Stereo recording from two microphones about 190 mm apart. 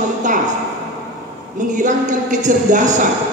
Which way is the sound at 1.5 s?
40° right (ahead or behind).